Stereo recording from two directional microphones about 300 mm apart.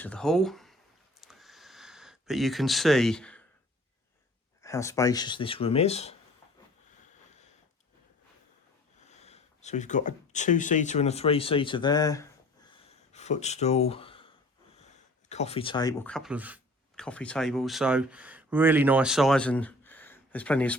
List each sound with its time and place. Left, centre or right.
0.0 s speech: centre
1.2 s a sound: centre
4.6 s speech: centre
9.0 s speech: left
12.7 s a sound: left
15.3 s speech: left; by 20.7 s centre